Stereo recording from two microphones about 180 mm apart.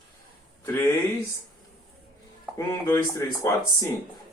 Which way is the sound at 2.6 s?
15° left (ahead or behind).